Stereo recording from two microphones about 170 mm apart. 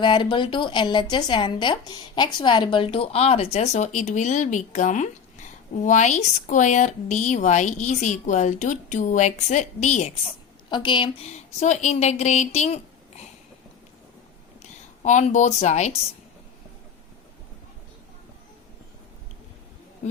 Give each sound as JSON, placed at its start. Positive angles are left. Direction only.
{"t": 0.0, "sound": "a woman's voice", "side_deg": 30}
{"t": 10.7, "sound": "speech", "side_deg": 30}
{"t": 14.6, "sound": "speech", "side_deg": 45}